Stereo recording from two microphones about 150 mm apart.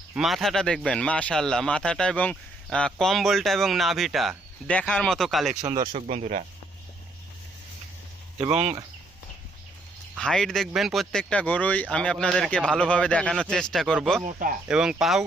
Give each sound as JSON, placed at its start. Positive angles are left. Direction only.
{"t": 0.2, "sound": "speech", "side_deg": 0}
{"t": 5.6, "sound": "speech", "side_deg": -30}
{"t": 6.1, "sound": "speech", "side_deg": -50}
{"t": 8.4, "sound": "speech", "side_deg": -45}
{"t": 10.2, "sound": "speech", "side_deg": 5}
{"t": 14.3, "sound": "speech", "side_deg": -65}
{"t": 14.7, "sound": "speech", "side_deg": -5}